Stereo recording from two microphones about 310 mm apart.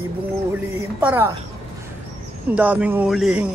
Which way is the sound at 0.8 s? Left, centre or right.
Centre.